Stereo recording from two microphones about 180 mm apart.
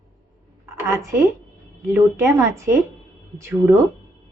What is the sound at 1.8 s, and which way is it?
Speech, 15° right (ahead or behind).